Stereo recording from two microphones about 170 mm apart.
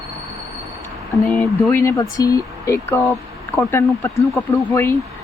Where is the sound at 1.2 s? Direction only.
10° left (ahead or behind).